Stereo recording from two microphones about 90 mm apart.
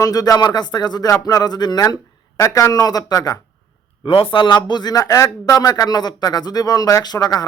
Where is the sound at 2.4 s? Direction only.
35° left (ahead or behind).